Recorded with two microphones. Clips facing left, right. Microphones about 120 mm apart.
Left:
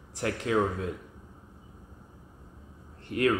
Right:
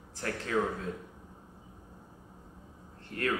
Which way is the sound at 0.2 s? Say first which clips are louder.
Left 6 dB; 15° left (ahead or behind).